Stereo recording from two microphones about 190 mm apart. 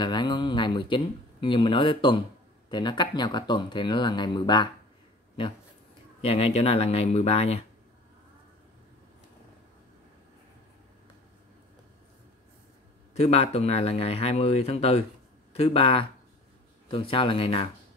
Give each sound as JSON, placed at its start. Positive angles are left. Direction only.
{"t": 0.0, "sound": "speech", "side_deg": 25}
{"t": 6.2, "sound": "speech", "side_deg": 30}
{"t": 13.1, "sound": "speech", "side_deg": 35}